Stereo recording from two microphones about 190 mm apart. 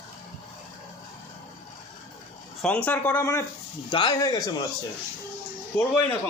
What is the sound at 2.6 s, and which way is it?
A man's voice, 5° left (ahead or behind).